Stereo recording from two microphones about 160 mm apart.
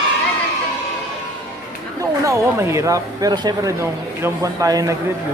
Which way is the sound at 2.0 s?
20° right (ahead or behind).